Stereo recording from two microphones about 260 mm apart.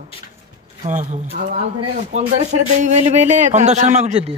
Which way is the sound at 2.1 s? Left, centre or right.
Right.